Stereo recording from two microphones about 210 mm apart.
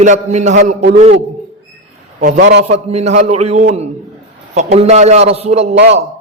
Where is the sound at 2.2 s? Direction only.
45° right (ahead or behind).